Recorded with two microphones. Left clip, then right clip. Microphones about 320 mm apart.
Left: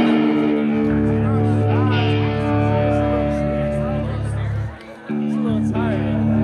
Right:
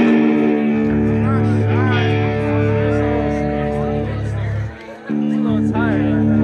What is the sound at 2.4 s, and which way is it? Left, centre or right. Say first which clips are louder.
Music: left 1 dB; left.